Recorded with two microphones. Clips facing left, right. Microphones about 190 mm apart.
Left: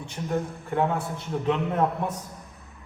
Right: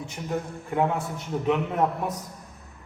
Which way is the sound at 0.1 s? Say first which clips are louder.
Left 4 dB; 10° right (ahead or behind).